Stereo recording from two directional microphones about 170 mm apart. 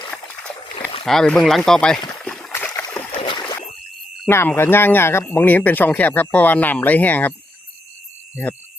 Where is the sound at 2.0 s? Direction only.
15° left (ahead or behind).